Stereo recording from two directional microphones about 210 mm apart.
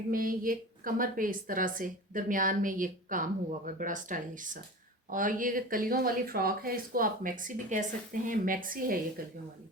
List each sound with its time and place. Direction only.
0.1 s speech: 40° right (ahead or behind)